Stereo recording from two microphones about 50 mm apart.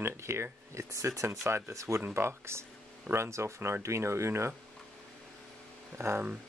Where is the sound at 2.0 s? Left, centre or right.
Right.